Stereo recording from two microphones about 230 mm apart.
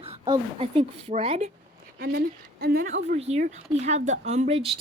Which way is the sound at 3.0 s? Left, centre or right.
Right.